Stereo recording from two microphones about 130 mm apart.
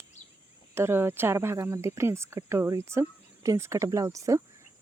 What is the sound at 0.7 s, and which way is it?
Speech, 20° right (ahead or behind).